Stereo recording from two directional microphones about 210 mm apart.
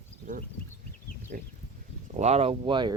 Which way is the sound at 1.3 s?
40° right (ahead or behind).